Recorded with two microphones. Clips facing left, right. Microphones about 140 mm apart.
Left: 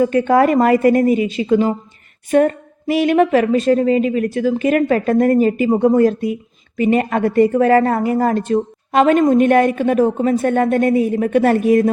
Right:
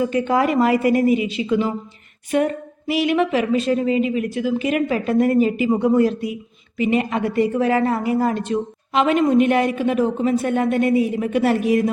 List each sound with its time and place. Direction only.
0.0 s a woman's voice: 50° left (ahead or behind)